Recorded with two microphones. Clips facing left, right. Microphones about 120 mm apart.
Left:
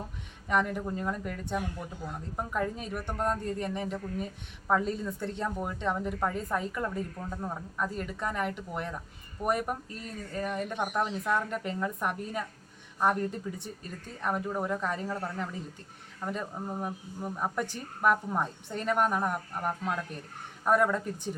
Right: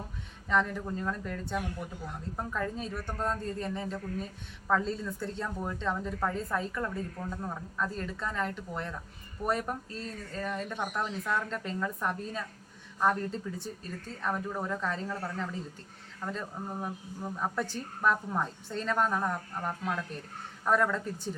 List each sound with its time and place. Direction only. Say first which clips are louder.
0.4 s speech: left 1 dB; 15° left (ahead or behind)